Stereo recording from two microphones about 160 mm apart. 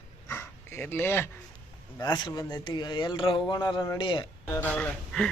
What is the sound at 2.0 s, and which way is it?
Speech, 25° left (ahead or behind).